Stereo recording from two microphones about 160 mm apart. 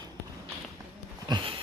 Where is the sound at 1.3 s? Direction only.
30° right (ahead or behind).